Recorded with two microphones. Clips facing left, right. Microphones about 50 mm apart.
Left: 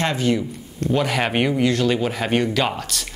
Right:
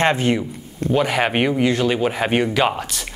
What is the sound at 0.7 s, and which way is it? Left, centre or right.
Speech, centre.